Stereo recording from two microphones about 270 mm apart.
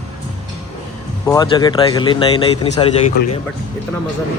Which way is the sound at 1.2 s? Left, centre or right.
Centre.